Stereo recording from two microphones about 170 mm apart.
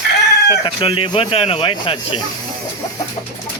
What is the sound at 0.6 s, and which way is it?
Speech, 35° left (ahead or behind).